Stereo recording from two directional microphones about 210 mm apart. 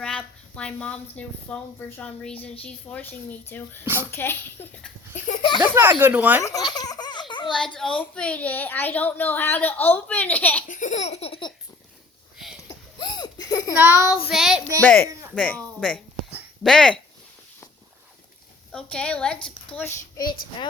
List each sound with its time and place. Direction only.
0.0 s a woman's voice: 5° left (ahead or behind)
5.1 s laughter: 35° left (ahead or behind)
5.6 s speech: 10° right (ahead or behind)
6.7 s baby laughter: 20° left (ahead or behind)
7.4 s a child's voice: 5° left (ahead or behind)
10.7 s laughter: 35° left (ahead or behind)
12.6 s a sound: 20° left (ahead or behind)
13.7 s a woman's voice: 10° right (ahead or behind)
18.7 s a woman's voice: 5° left (ahead or behind)